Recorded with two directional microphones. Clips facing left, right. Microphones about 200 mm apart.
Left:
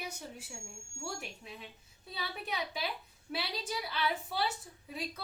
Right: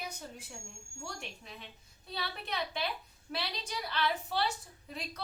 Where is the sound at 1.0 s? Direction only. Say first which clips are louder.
Left 2 dB; 5° left (ahead or behind).